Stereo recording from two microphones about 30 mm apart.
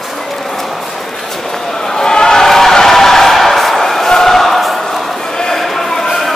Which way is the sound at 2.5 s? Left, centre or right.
Centre.